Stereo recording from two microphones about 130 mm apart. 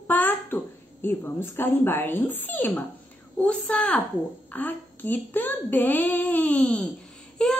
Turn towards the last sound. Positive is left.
turn(degrees=5)  # may be behind; listen again after turning